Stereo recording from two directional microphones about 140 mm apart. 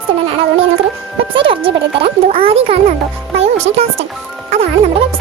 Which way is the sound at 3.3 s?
50° right (ahead or behind).